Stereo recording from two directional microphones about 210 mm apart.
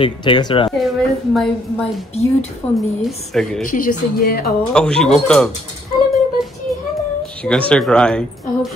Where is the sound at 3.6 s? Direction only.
40° left (ahead or behind).